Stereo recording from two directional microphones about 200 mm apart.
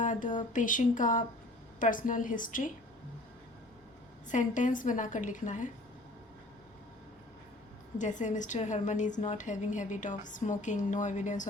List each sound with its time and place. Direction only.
0.0 s a sound: 40° left (ahead or behind)
0.5 s a woman's voice: 40° left (ahead or behind)
4.3 s a woman's voice: 40° left (ahead or behind)
7.9 s a woman's voice: 40° left (ahead or behind)